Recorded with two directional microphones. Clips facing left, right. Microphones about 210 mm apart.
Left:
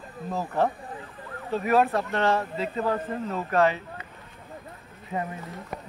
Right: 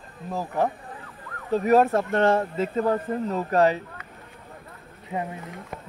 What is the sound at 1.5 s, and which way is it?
Speech, 40° right (ahead or behind).